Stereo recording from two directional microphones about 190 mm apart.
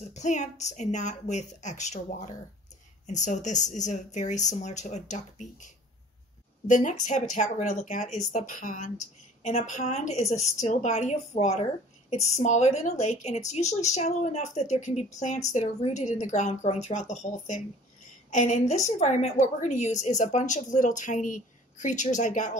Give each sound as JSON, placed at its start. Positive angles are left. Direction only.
{"t": 0.1, "sound": "a woman's voice", "side_deg": 40}
{"t": 6.7, "sound": "a woman's voice", "side_deg": 40}